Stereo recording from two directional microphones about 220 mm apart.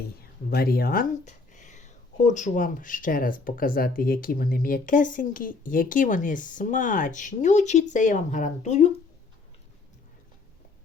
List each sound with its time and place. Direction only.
0.5 s speech: 45° left (ahead or behind)